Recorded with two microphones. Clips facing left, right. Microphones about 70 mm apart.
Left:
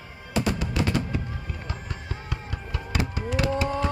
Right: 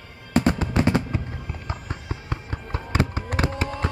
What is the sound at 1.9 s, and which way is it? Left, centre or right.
Fireworks, right.